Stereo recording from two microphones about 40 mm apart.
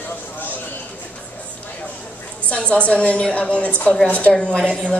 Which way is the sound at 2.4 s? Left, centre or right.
Left.